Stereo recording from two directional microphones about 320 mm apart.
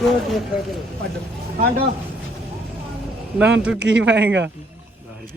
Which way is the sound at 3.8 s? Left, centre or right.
Right.